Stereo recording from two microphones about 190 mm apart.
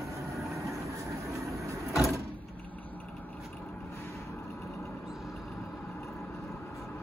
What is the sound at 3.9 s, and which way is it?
Vehicle, 15° left (ahead or behind).